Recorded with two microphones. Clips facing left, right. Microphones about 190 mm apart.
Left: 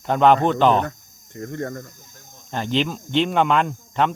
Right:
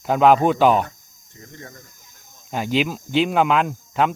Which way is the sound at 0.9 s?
60° left (ahead or behind).